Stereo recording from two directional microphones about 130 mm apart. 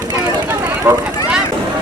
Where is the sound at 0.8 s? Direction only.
15° right (ahead or behind).